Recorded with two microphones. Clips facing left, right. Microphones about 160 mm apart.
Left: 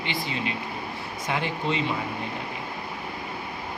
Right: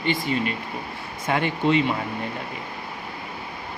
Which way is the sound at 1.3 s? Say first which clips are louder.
Right 6 dB; 60° right (ahead or behind).